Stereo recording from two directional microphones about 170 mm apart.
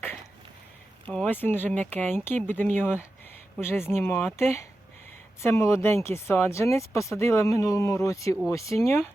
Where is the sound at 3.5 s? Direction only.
15° left (ahead or behind).